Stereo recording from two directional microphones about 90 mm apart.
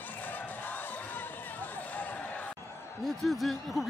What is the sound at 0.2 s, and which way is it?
Music, 20° left (ahead or behind).